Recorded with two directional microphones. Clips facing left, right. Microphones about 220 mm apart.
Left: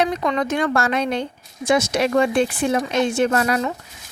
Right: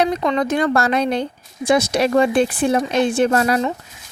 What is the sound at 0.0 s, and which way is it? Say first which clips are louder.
Speech: right 2 dB; 30° right (ahead or behind).